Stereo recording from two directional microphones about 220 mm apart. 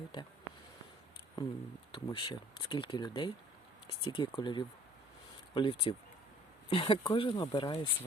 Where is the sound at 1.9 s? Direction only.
20° left (ahead or behind).